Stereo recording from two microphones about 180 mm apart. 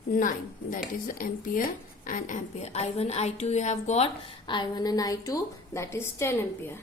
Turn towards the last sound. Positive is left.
turn(degrees=15)  # may be behind; listen again after turning